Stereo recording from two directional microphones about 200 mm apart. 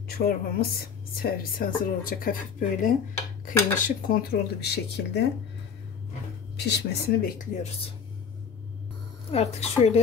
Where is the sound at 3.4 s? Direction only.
45° left (ahead or behind).